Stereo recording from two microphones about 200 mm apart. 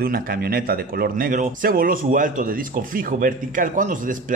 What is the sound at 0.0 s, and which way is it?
Speech, 50° right (ahead or behind).